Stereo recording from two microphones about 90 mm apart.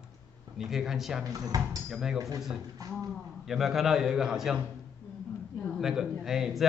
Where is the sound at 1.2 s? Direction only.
40° right (ahead or behind).